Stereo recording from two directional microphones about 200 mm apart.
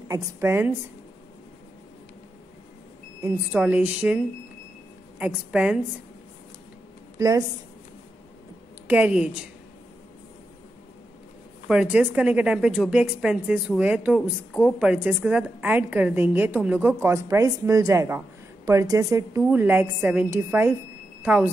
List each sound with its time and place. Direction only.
0.1 s a woman's voice: 10° right (ahead or behind)
3.2 s a woman's voice: 10° right (ahead or behind)
5.2 s a woman's voice: 5° right (ahead or behind)
7.2 s speech: 15° right (ahead or behind)
8.8 s a woman's voice: 5° right (ahead or behind)
11.6 s a woman's voice: 5° right (ahead or behind)